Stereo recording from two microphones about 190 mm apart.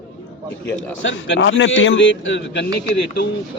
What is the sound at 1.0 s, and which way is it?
A man's voice, 70° left (ahead or behind).